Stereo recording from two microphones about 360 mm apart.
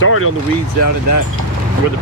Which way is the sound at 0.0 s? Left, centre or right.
Left.